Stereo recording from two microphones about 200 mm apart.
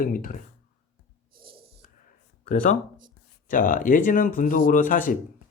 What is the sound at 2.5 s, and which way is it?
A man's voice, 40° left (ahead or behind).